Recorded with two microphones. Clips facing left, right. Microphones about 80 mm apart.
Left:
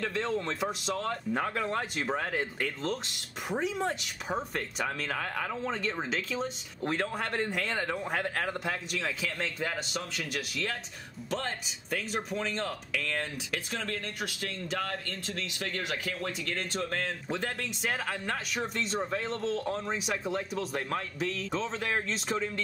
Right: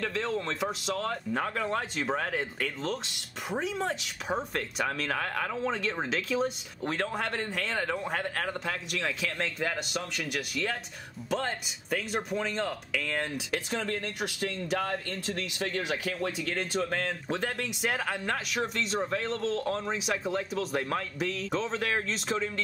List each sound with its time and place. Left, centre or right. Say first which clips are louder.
0.0 s speech: even; centre
13.7 s speech: right 3 dB; centre